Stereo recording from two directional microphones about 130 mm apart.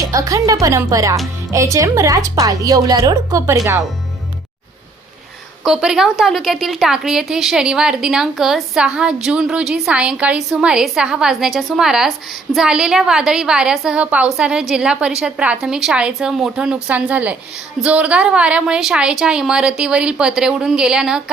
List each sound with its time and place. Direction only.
0.0 s a woman's voice: 25° right (ahead or behind)
5.6 s a woman's voice: 5° right (ahead or behind)